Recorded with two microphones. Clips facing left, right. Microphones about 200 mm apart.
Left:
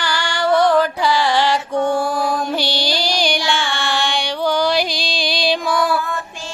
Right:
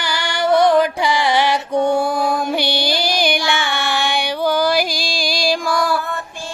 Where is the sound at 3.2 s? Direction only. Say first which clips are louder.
Right 1 dB; 15° right (ahead or behind); by 5.9 s centre (ahead or behind).